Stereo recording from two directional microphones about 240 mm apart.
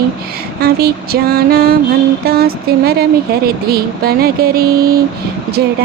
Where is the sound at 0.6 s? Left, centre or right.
Right.